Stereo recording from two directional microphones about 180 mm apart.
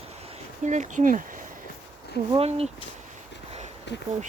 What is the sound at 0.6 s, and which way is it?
Speech, 40° right (ahead or behind).